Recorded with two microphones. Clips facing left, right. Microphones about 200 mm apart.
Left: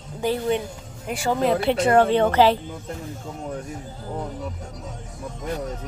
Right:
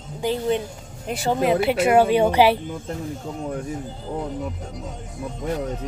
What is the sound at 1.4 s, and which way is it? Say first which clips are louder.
Speech: right 1 dB; 5° right (ahead or behind).